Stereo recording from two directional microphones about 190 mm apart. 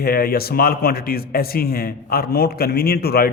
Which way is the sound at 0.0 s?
50° left (ahead or behind).